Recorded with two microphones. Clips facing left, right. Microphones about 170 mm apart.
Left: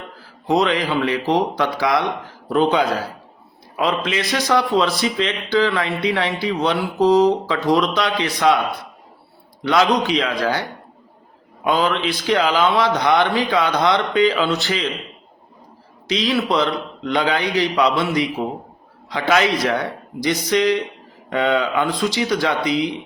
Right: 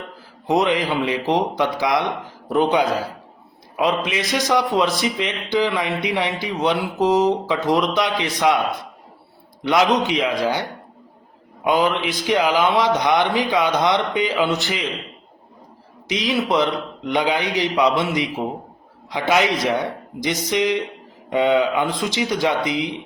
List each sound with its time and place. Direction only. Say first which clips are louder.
0.4 s a man's voice: even; 20° right (ahead or behind)
10.0 s a man's voice: even; 20° right (ahead or behind)
16.0 s a man's voice: left 1 dB; 15° right (ahead or behind)